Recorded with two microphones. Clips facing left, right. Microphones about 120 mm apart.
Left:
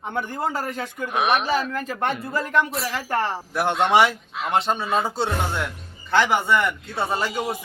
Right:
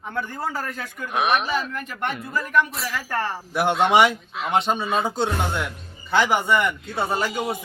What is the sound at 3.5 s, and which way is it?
Speech, centre (ahead or behind).